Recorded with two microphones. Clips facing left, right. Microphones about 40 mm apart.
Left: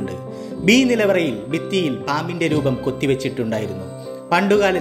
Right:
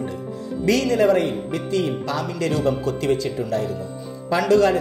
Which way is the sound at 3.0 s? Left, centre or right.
Left.